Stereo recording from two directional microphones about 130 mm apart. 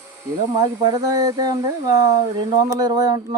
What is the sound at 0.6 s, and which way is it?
Speech, 30° right (ahead or behind).